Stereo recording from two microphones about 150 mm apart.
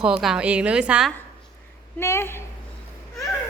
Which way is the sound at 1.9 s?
15° left (ahead or behind).